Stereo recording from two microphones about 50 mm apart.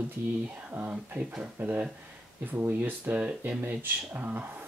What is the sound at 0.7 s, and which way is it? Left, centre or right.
Speech, right.